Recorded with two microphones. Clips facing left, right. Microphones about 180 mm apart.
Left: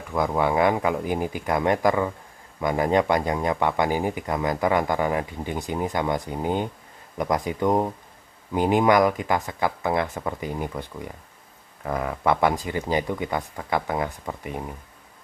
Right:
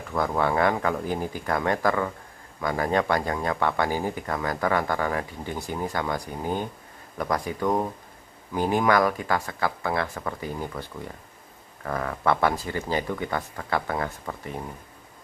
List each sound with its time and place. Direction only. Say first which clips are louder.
0.1 s speech: left 2 dB; 15° left (ahead or behind)